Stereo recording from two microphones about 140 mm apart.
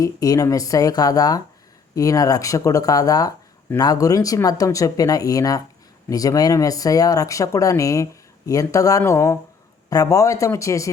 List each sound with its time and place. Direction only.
0.0 s speech: 25° left (ahead or behind)